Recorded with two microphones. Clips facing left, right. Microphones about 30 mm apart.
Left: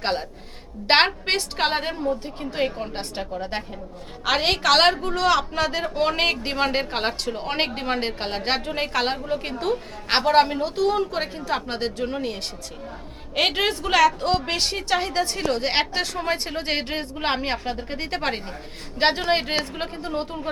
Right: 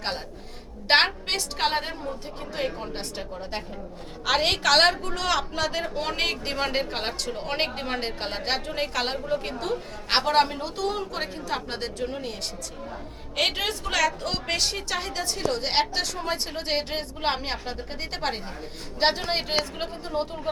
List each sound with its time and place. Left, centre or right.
0.9 s a woman's voice: centre
12.0 s a woman's voice: left
15.9 s a woman's voice: left
16.6 s a woman's voice: centre
20.1 s a woman's voice: centre